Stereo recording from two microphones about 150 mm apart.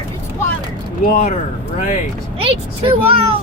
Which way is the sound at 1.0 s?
60° left (ahead or behind).